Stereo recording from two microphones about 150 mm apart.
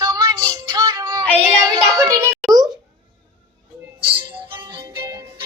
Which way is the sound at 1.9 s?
20° right (ahead or behind).